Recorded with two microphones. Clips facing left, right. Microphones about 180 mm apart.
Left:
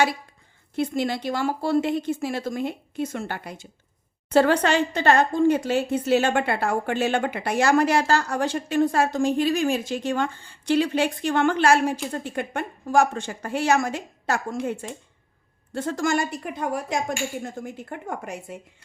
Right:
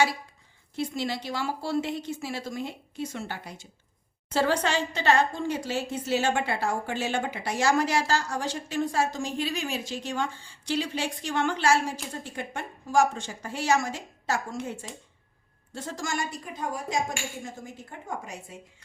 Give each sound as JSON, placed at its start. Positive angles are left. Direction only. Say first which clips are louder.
{"t": 0.8, "sound": "speech", "louder": "left 6 dB", "side_deg": 55}